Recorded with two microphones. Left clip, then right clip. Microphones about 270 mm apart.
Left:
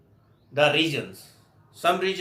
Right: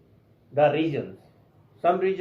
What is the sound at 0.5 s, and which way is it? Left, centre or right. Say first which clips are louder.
Speech: even; left.